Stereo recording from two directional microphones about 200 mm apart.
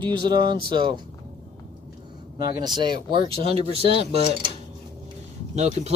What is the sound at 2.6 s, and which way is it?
Speech, 20° right (ahead or behind).